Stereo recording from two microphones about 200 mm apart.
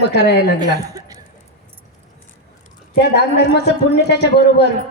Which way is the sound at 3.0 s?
55° left (ahead or behind).